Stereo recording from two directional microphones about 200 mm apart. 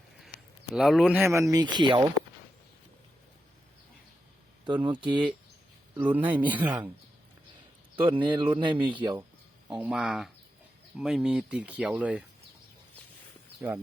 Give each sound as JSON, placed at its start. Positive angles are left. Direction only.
{"t": 0.7, "sound": "speech", "side_deg": 0}
{"t": 1.2, "sound": "speech", "side_deg": -15}
{"t": 4.6, "sound": "speech", "side_deg": -25}
{"t": 6.0, "sound": "speech", "side_deg": -10}
{"t": 8.0, "sound": "speech", "side_deg": -25}
{"t": 9.6, "sound": "speech", "side_deg": -5}